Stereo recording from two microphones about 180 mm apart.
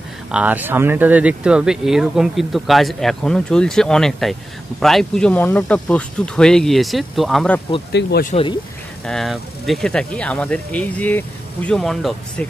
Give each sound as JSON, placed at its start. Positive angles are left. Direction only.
{"t": 0.3, "sound": "speech", "side_deg": -10}
{"t": 7.9, "sound": "speech", "side_deg": 65}
{"t": 9.0, "sound": "speech", "side_deg": 0}